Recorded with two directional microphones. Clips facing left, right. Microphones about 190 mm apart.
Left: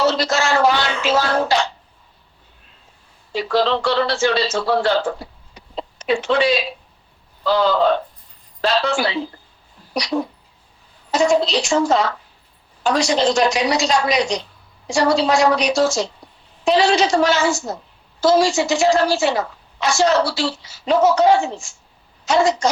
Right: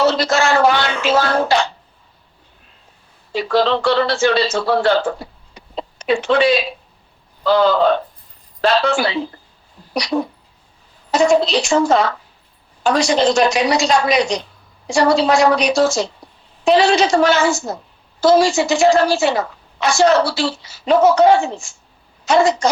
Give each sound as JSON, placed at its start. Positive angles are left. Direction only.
{"t": 0.0, "sound": "a woman's voice", "side_deg": -55}
{"t": 3.3, "sound": "a woman's voice", "side_deg": -60}